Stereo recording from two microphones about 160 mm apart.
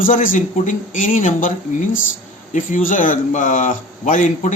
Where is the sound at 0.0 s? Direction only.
60° left (ahead or behind).